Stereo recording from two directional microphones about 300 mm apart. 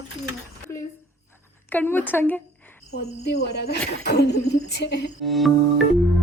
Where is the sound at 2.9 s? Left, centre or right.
Left.